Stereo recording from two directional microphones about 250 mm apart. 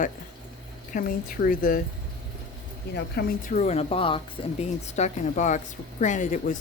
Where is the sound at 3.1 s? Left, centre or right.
Left.